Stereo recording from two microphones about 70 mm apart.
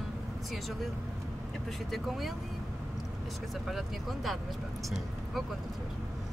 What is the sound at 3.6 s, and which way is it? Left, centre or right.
Speech, centre.